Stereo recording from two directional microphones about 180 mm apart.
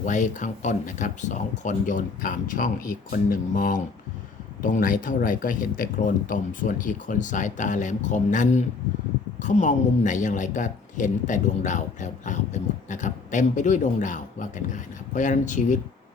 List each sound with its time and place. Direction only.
0.0 s speech: 45° left (ahead or behind)